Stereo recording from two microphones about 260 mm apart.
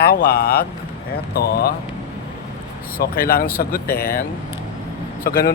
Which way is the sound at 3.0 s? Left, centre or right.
Left.